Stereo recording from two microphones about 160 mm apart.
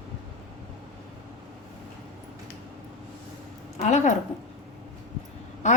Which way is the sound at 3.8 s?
50° left (ahead or behind).